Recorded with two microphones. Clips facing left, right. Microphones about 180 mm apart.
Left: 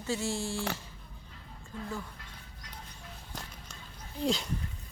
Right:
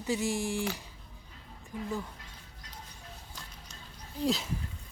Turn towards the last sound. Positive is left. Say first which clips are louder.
# right 1 dB
turn(degrees=0)  # may be behind; listen again after turning